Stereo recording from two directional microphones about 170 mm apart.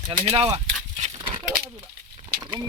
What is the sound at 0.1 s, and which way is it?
Speech, 30° right (ahead or behind).